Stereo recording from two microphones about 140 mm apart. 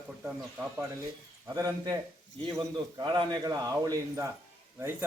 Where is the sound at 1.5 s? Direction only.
25° right (ahead or behind).